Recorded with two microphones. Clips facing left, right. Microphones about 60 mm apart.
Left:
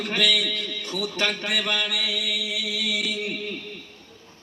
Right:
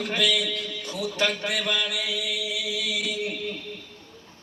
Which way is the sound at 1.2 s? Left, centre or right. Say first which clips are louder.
Even; left.